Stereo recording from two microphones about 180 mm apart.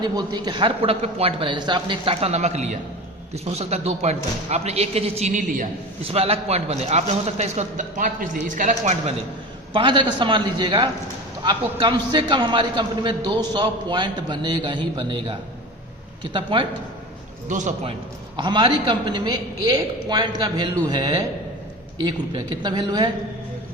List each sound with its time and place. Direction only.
0.0 s a man's voice: 25° right (ahead or behind); by 5.6 s 45° right (ahead or behind)
6.1 s a man's voice: 35° right (ahead or behind)
9.7 s a man's voice: 25° right (ahead or behind)
17.5 s a man's voice: 40° right (ahead or behind)
18.3 s a man's voice: 25° right (ahead or behind)
22.6 s a man's voice: 25° right (ahead or behind)